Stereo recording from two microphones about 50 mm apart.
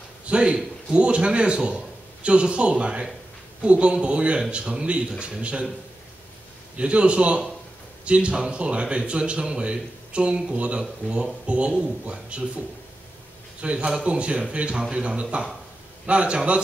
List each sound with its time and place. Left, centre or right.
0.3 s a man's voice: centre
6.8 s a man's voice: right